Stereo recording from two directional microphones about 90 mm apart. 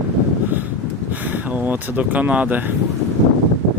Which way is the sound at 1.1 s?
20° right (ahead or behind).